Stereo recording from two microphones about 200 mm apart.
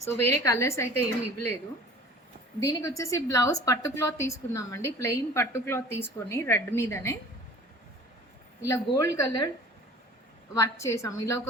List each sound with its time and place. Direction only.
0.0 s a woman's voice: 15° left (ahead or behind)
2.6 s a woman's voice: 15° left (ahead or behind)
8.6 s a woman's voice: 15° left (ahead or behind)
10.5 s a woman's voice: 15° left (ahead or behind)